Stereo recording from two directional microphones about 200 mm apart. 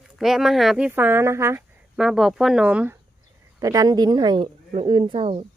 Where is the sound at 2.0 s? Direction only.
Centre (ahead or behind).